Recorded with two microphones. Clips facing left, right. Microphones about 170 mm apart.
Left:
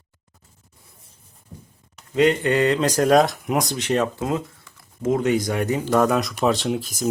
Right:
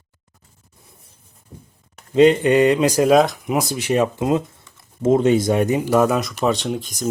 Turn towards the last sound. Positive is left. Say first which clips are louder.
# left 1 dB
turn(degrees=5)  # may be behind; listen again after turning